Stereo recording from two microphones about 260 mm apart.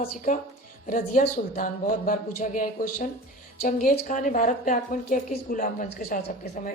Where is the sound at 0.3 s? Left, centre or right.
Left.